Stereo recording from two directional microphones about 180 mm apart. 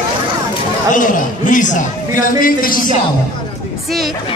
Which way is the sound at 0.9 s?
45° left (ahead or behind).